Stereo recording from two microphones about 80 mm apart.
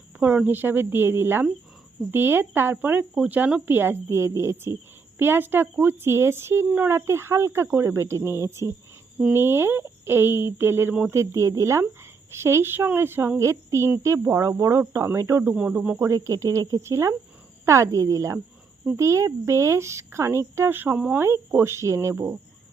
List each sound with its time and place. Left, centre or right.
0.2 s speech: centre; by 15.4 s right
15.4 s speech: centre
16.0 s speech: right